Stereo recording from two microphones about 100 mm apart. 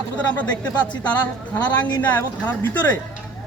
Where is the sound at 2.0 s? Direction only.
15° left (ahead or behind).